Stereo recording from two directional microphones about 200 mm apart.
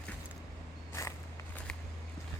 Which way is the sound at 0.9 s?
15° left (ahead or behind).